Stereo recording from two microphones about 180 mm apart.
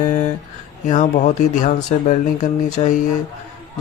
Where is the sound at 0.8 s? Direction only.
40° left (ahead or behind).